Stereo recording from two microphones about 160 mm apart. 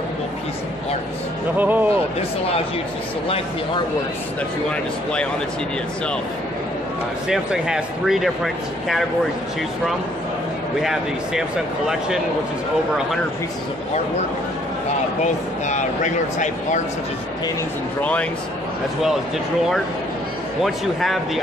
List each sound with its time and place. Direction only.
1.6 s speech: 10° right (ahead or behind)
4.6 s speech: 5° left (ahead or behind)
7.2 s speech: 5° right (ahead or behind)
10.8 s speech: centre (ahead or behind)
15.6 s speech: 50° left (ahead or behind)
20.6 s speech: centre (ahead or behind)